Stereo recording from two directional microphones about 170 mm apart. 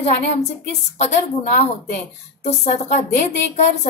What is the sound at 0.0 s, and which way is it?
A woman's voice, 40° left (ahead or behind).